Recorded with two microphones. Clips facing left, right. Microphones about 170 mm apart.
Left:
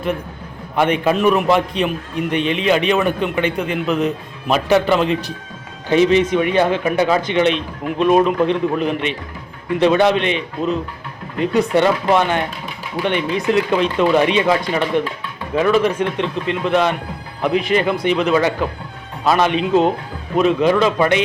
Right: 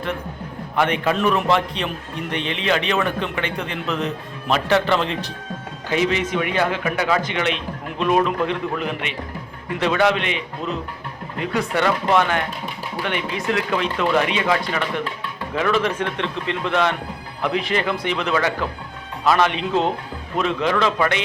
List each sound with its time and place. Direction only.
0.8 s a man's voice: 20° left (ahead or behind)
5.9 s a man's voice: 25° left (ahead or behind)